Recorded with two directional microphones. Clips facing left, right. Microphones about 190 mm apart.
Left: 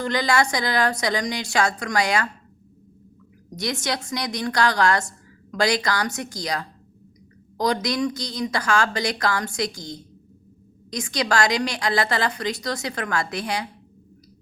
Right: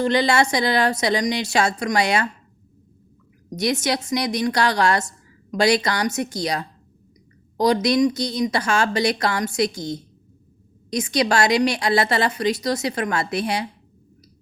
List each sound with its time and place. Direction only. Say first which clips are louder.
0.0 s a woman's voice: right 3 dB; 25° right (ahead or behind)
3.5 s a woman's voice: right 5 dB; 20° right (ahead or behind)